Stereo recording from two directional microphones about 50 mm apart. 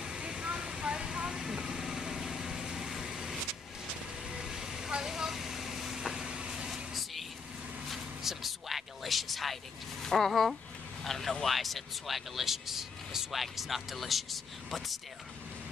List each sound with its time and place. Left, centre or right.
0.1 s vehicle: right
6.7 s vehicle: centre
7.9 s a sound: centre
10.0 s speech: centre